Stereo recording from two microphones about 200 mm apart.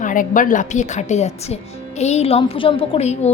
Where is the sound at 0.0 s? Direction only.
40° left (ahead or behind).